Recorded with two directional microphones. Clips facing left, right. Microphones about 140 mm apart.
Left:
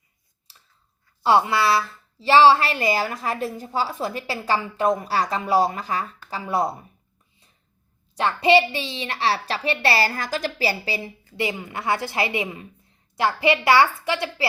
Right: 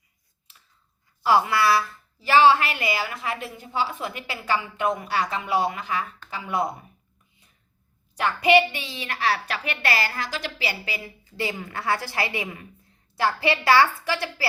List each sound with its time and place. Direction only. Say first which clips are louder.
0.5 s scissors: left 1 dB; 35° left (ahead or behind)
1.2 s a woman's voice: left 2 dB; 25° left (ahead or behind)
8.1 s a woman's voice: left 1 dB; 30° left (ahead or behind)
11.3 s a woman's voice: left 3 dB; 20° left (ahead or behind)